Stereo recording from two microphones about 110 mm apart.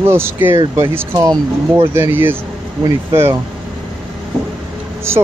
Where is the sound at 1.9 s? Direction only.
20° right (ahead or behind).